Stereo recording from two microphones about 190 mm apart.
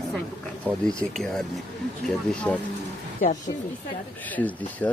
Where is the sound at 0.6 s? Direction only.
Centre (ahead or behind).